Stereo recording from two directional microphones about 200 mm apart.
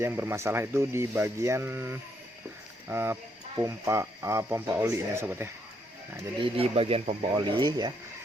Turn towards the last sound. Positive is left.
turn(degrees=-20)  # may be behind; listen again after turning